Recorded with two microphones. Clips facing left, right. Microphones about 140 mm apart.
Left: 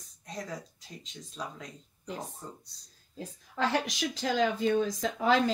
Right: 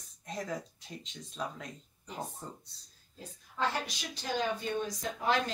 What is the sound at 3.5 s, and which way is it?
Speech, 90° left.